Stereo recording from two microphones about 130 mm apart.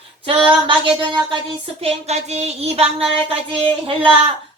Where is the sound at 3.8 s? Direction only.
40° right (ahead or behind).